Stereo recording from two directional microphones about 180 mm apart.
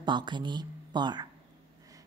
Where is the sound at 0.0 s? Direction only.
25° right (ahead or behind).